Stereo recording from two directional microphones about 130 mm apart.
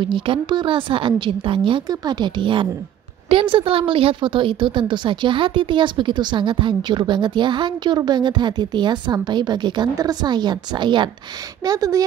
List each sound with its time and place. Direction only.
0.0 s a woman's voice: 40° right (ahead or behind)